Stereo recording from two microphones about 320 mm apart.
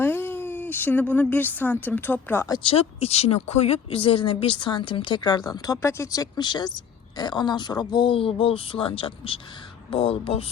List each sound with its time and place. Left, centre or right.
0.0 s speech: centre